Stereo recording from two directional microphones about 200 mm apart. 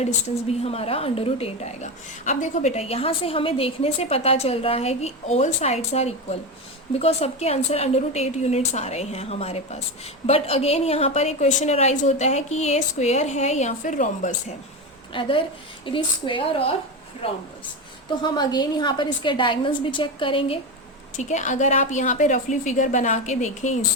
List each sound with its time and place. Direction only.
0.0 s a woman's voice: 30° left (ahead or behind)
15.1 s a woman's voice: 25° left (ahead or behind)
21.2 s a woman's voice: 35° left (ahead or behind)